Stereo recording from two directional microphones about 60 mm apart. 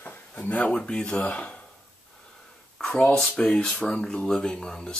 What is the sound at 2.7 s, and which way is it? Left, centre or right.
Speech, centre.